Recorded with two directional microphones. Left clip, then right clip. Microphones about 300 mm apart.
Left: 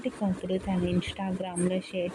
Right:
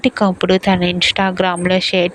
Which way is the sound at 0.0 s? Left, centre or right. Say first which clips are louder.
Right 18 dB; right.